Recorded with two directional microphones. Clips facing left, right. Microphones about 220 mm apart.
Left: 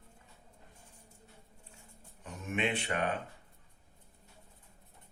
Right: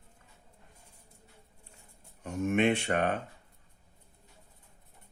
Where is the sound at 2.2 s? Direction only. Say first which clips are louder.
Right 8 dB; 45° right (ahead or behind).